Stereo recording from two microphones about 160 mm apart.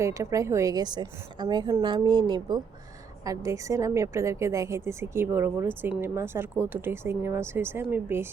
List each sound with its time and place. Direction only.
0.0 s a woman's voice: 20° right (ahead or behind)